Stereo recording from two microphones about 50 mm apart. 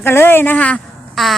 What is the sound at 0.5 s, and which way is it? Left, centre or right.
Speech, left.